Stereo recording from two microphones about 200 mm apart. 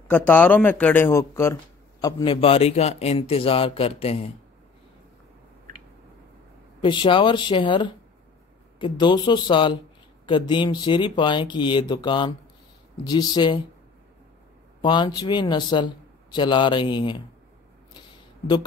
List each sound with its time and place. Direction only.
0.1 s speech: 10° left (ahead or behind)
2.3 s speech: 30° left (ahead or behind)
6.8 s speech: 25° left (ahead or behind)
14.8 s speech: 25° left (ahead or behind)